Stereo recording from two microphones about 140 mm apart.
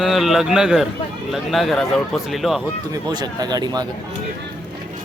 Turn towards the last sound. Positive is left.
turn(degrees=-30)  # may be behind; listen again after turning